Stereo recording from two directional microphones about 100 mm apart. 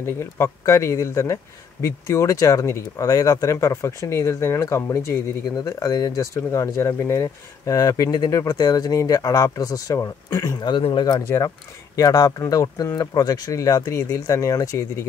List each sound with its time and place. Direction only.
0.0 s speech: 30° left (ahead or behind); by 11.2 s 45° left (ahead or behind)
11.2 s speech: 35° left (ahead or behind)